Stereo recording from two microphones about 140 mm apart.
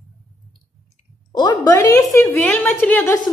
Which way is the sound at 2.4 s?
10° left (ahead or behind).